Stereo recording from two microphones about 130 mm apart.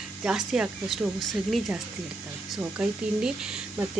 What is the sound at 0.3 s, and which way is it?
Speech, 5° right (ahead or behind).